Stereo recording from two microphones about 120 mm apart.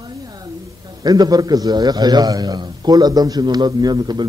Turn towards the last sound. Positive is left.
turn(degrees=-35)  # may be behind; listen again after turning